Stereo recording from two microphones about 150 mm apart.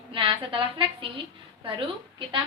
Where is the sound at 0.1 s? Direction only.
35° right (ahead or behind).